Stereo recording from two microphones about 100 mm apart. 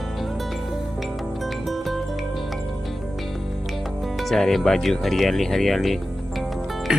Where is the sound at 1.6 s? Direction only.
Centre (ahead or behind).